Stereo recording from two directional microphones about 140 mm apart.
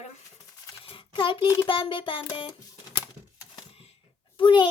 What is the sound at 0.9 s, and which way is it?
Speech, 40° left (ahead or behind).